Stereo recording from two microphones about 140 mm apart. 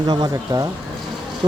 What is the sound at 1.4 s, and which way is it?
Bee, 35° right (ahead or behind).